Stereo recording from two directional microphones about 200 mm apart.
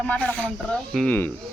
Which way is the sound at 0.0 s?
5° left (ahead or behind).